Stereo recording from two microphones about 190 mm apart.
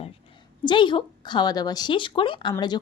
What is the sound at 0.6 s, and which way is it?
A woman's voice, 25° left (ahead or behind).